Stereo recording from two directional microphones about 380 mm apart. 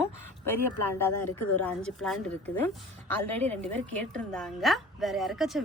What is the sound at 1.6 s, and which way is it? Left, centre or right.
A woman's voice, centre.